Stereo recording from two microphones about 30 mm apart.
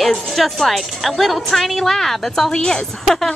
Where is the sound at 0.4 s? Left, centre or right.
Centre.